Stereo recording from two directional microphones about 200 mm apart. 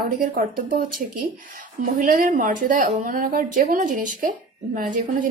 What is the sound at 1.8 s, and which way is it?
A woman's voice, 45° right (ahead or behind).